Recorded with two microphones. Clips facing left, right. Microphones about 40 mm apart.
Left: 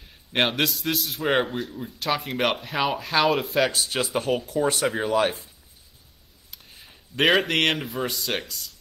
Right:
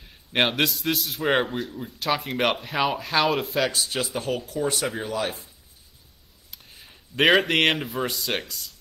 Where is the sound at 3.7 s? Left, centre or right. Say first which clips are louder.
Left 1 dB; left.